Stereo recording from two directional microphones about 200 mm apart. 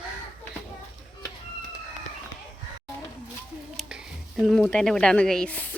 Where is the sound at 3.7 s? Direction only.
Centre (ahead or behind).